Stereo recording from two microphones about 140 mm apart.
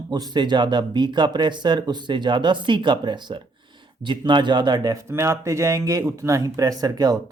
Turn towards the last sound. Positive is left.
turn(degrees=-25)  # may be behind; listen again after turning